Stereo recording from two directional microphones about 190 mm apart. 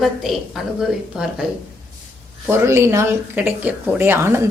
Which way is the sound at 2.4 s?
15° right (ahead or behind).